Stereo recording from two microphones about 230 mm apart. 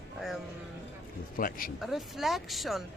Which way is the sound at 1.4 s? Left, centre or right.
Left.